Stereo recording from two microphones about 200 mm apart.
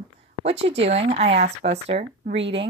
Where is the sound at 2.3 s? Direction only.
65° right (ahead or behind).